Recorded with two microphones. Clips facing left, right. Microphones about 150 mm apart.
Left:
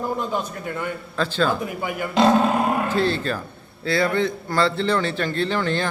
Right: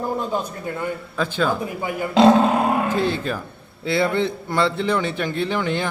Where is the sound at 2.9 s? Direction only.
15° right (ahead or behind).